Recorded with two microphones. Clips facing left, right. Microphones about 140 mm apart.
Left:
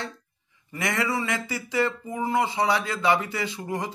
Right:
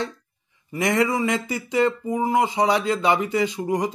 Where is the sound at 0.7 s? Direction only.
20° right (ahead or behind).